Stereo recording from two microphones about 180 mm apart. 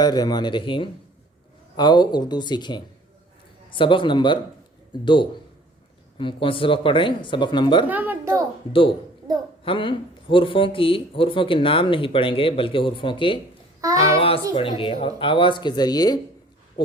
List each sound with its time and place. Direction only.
0.0 s speech: 20° left (ahead or behind)
7.9 s speech: 10° right (ahead or behind)
8.7 s speech: 30° left (ahead or behind)
13.8 s a child's voice: 20° right (ahead or behind)
14.2 s a woman's voice: 30° left (ahead or behind)